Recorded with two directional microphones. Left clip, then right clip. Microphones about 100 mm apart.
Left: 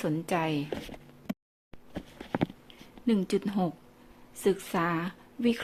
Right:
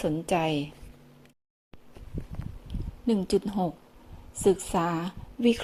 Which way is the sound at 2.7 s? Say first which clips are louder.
Right 6 dB; 20° right (ahead or behind).